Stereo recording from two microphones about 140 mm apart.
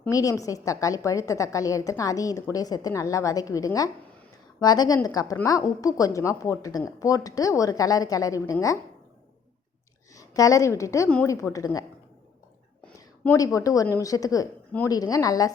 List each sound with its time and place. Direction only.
0.1 s a woman's voice: 25° left (ahead or behind)
10.2 s a woman's voice: 25° left (ahead or behind)
13.3 s a woman's voice: 25° left (ahead or behind)